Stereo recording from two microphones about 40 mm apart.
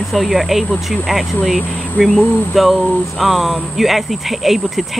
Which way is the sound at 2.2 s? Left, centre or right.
Left.